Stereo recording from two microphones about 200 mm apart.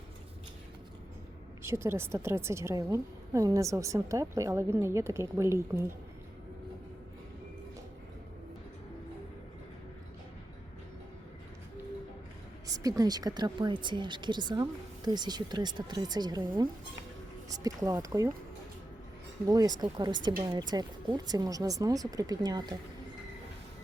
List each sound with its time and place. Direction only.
1.6 s a woman's voice: 15° right (ahead or behind)
12.6 s a woman's voice: 15° right (ahead or behind)
19.5 s speech: 20° right (ahead or behind)